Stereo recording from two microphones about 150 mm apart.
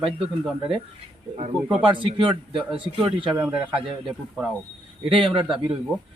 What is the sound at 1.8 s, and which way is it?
A man's voice, 35° right (ahead or behind).